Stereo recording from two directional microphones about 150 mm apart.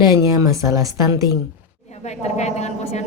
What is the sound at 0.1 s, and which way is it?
A woman's voice, 20° right (ahead or behind).